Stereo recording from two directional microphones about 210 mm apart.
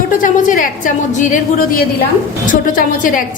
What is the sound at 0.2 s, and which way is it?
A woman's voice, 40° left (ahead or behind).